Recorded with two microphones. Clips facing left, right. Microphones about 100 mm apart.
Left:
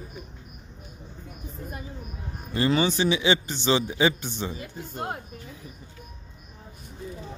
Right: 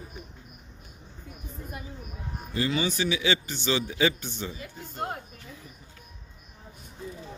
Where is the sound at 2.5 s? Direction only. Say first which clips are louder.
Left 5 dB; 40° left (ahead or behind).